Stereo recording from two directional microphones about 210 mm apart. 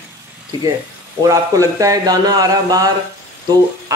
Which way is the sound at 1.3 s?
15° right (ahead or behind).